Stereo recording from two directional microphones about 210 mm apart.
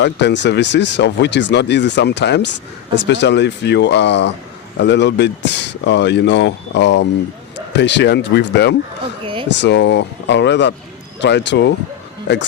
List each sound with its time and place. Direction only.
0.0 s speech: 55° left (ahead or behind)
9.2 s speech: 25° right (ahead or behind)
9.6 s speech: 55° left (ahead or behind)